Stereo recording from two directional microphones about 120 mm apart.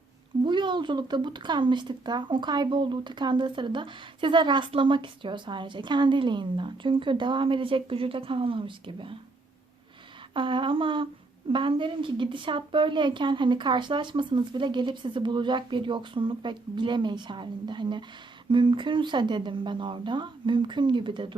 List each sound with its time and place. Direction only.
0.4 s speech: 40° right (ahead or behind)
10.3 s a woman's voice: 45° right (ahead or behind)